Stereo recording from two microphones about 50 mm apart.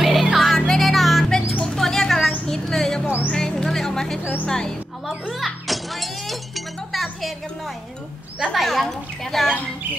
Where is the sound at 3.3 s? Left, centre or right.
Centre.